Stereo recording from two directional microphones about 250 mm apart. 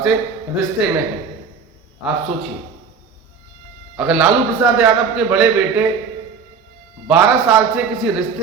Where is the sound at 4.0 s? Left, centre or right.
Centre.